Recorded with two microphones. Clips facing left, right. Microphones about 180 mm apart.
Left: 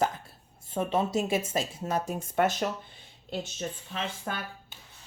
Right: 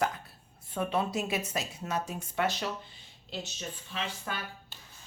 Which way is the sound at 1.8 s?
45° left (ahead or behind).